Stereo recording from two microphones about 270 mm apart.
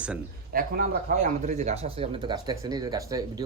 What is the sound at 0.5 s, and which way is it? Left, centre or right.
Speech, right.